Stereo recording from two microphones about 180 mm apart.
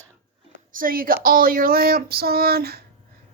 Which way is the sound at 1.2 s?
50° right (ahead or behind).